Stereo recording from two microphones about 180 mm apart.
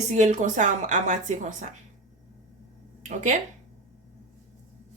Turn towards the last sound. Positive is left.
turn(degrees=-45)  # may be behind; listen again after turning